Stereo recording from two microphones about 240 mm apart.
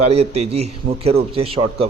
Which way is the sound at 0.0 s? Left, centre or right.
Right.